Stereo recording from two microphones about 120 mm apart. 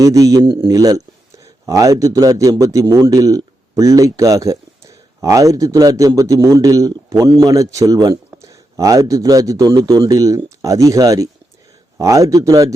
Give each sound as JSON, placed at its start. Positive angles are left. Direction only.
{"t": 0.0, "sound": "a man's voice", "side_deg": -30}